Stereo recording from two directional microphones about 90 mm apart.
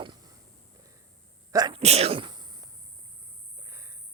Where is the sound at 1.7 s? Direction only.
80° right; by 2.7 s 50° right (ahead or behind).